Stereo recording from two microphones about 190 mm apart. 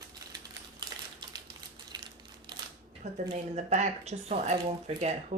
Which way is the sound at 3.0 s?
35° right (ahead or behind).